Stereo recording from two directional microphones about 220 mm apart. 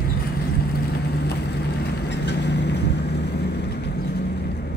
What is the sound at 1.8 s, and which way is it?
Vehicle, 50° left (ahead or behind).